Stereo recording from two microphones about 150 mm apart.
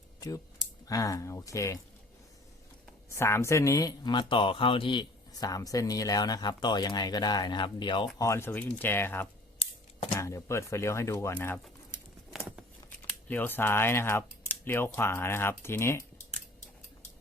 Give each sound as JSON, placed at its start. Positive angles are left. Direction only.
{"t": 0.2, "sound": "speech", "side_deg": 25}
{"t": 3.1, "sound": "speech", "side_deg": 15}
{"t": 12.3, "sound": "a sound", "side_deg": -5}
{"t": 13.2, "sound": "speech", "side_deg": 10}